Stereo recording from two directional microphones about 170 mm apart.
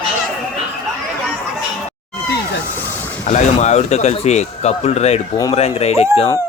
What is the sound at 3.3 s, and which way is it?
Speech, 40° left (ahead or behind).